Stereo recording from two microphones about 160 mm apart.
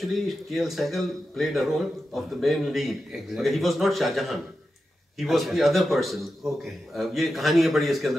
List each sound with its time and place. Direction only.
0.0 s speech: centre (ahead or behind)